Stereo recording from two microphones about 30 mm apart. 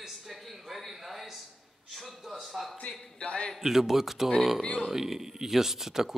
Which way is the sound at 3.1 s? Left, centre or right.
Left.